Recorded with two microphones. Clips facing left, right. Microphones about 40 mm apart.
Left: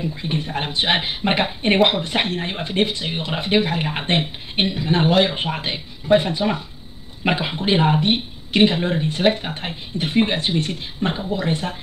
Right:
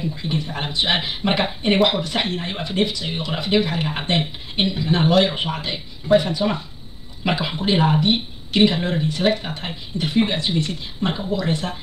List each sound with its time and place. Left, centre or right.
0.3 s speech: left
7.2 s speech: left
8.7 s speech: left